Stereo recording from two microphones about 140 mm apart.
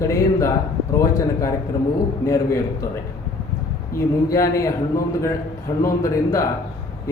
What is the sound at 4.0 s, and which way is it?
Speech, 20° left (ahead or behind).